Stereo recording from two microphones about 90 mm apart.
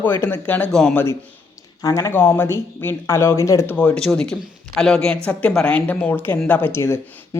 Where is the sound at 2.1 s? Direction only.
25° left (ahead or behind).